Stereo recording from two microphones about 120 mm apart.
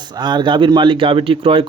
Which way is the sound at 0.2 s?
35° right (ahead or behind).